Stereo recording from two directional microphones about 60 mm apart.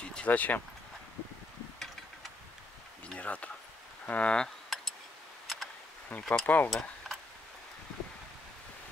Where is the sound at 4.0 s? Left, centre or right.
Left.